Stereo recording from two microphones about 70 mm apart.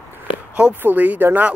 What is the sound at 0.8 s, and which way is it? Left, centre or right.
Speech, right.